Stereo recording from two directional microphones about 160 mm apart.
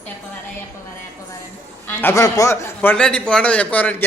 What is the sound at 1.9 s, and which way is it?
A man's voice, 15° left (ahead or behind).